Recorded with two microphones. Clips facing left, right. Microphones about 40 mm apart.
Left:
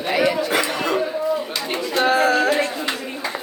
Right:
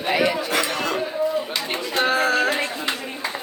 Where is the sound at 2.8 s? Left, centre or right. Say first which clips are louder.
Left 1 dB; centre.